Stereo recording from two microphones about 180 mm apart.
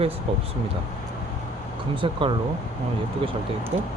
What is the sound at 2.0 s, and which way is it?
Speech, 30° right (ahead or behind).